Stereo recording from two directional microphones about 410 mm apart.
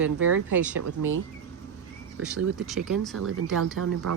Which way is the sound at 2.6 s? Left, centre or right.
Centre.